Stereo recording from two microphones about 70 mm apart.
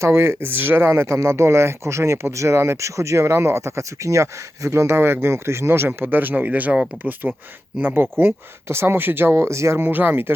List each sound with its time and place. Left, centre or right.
0.0 s speech: right